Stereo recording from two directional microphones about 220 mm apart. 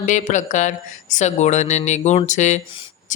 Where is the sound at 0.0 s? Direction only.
35° left (ahead or behind).